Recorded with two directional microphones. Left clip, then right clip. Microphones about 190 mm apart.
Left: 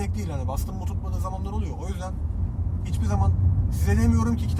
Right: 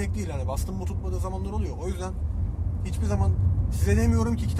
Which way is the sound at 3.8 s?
35° right (ahead or behind).